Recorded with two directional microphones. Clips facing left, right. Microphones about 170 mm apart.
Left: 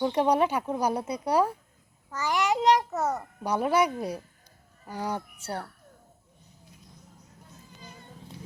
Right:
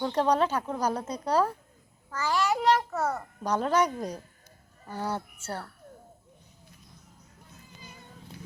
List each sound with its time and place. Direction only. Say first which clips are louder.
0.0 s a child's voice: left 2 dB; 10° left (ahead or behind)